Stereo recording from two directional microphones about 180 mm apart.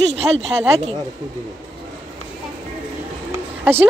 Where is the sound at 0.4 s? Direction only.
35° right (ahead or behind).